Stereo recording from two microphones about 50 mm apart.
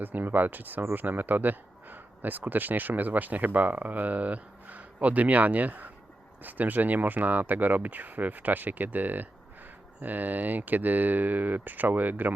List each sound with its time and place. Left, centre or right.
0.0 s speech: right